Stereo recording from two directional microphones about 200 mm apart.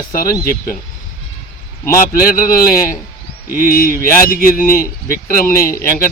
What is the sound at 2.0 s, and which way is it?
Speech, 45° left (ahead or behind).